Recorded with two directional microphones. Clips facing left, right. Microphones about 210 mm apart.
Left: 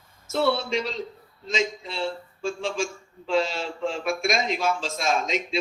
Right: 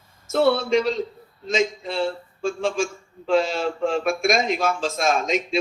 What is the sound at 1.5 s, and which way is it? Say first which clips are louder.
Speech: right 5 dB; 50° right (ahead or behind).